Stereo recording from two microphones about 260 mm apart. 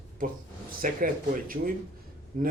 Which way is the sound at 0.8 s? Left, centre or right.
Right.